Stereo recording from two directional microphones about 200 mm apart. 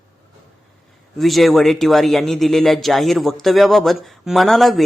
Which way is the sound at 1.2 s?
Centre (ahead or behind).